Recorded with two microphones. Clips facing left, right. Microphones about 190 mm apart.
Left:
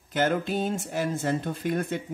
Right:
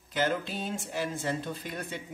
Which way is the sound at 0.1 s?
50° left (ahead or behind).